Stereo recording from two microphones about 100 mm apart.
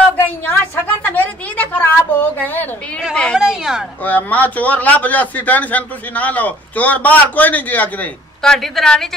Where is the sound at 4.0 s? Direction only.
15° left (ahead or behind).